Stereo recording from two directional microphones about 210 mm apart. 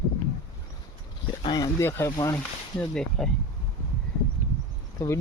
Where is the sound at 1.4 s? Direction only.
20° left (ahead or behind).